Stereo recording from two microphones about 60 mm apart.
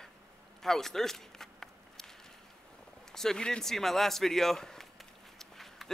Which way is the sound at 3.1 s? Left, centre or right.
Centre.